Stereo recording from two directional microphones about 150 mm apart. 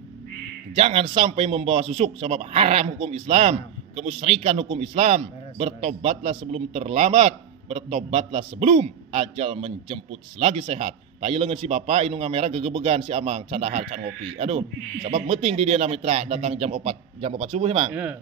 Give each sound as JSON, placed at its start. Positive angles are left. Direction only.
{"t": 0.7, "sound": "a man's voice", "side_deg": -40}